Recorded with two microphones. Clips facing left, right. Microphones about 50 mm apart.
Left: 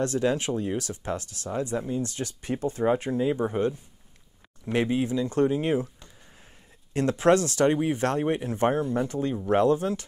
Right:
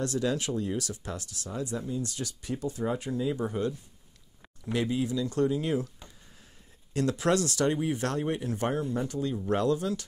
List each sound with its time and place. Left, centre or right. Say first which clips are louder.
0.0 s speech: left 4 dB; left
4.7 s speech: left 4 dB; left
6.9 s speech: left 5 dB; left